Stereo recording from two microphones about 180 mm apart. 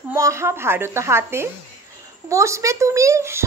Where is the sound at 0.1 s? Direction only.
15° right (ahead or behind).